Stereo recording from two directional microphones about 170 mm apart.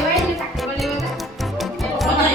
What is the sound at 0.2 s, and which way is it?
Music, centre (ahead or behind).